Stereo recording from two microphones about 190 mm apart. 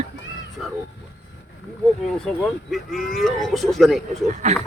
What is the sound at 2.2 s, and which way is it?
Speech, 5° left (ahead or behind).